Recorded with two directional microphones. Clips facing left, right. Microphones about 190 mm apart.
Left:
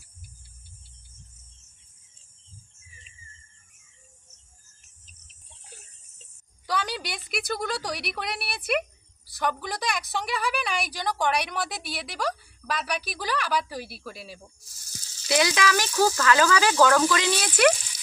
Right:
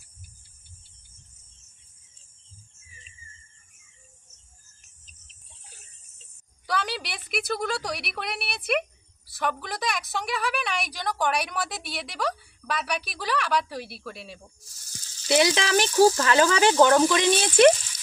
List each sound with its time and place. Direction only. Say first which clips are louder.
6.7 s a woman's voice: even; centre (ahead or behind)
15.3 s speech: right 2 dB; 25° right (ahead or behind)